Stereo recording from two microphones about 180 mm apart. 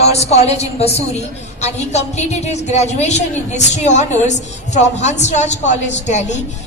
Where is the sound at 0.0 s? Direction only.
35° left (ahead or behind).